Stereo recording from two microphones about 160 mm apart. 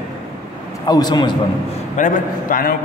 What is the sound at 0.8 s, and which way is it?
Speech, 25° left (ahead or behind).